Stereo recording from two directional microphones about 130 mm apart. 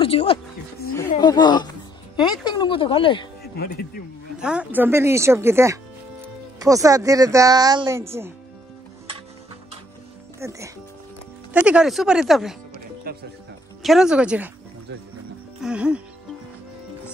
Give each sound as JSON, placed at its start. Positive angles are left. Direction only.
{"t": 0.0, "sound": "speech", "side_deg": 45}
{"t": 1.2, "sound": "speech", "side_deg": 35}
{"t": 4.4, "sound": "speech", "side_deg": -10}
{"t": 8.0, "sound": "speech", "side_deg": -20}
{"t": 10.4, "sound": "speech", "side_deg": -20}
{"t": 11.5, "sound": "speech", "side_deg": -10}
{"t": 13.8, "sound": "speech", "side_deg": -5}
{"t": 15.6, "sound": "speech", "side_deg": -10}